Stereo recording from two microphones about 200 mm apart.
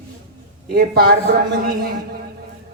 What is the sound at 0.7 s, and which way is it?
A man's voice, 50° right (ahead or behind).